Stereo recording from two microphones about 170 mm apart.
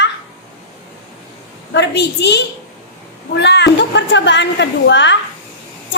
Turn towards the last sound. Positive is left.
turn(degrees=90)